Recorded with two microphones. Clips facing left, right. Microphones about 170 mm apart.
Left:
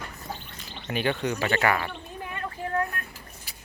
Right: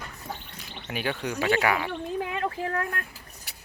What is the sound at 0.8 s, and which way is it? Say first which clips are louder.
Speech: left 3 dB; 5° right (ahead or behind).